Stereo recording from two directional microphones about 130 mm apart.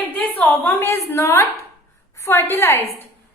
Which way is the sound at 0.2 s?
10° left (ahead or behind).